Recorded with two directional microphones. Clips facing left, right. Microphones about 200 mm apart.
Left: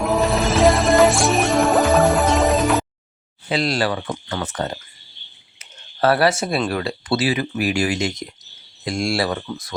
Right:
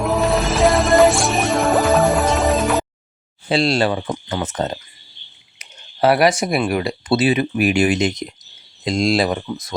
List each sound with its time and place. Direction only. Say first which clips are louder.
0.0 s music: right 1 dB; centre (ahead or behind)
3.5 s speech: right 4 dB; 25° right (ahead or behind)